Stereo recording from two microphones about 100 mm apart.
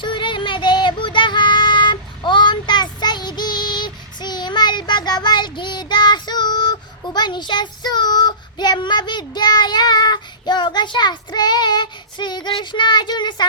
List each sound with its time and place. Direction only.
0.0 s child singing: 55° left (ahead or behind)